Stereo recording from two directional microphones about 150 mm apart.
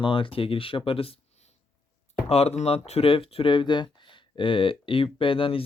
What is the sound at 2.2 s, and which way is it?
Speech, 45° left (ahead or behind).